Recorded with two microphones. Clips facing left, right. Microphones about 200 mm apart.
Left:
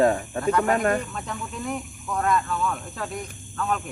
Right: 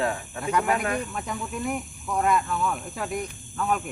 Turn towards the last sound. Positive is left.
turn(degrees=-10)  # may be behind; listen again after turning